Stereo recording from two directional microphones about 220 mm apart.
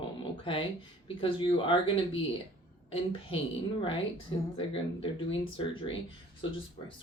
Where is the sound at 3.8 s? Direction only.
20° left (ahead or behind).